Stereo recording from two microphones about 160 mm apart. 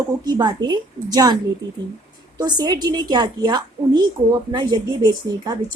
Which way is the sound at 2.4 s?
25° right (ahead or behind).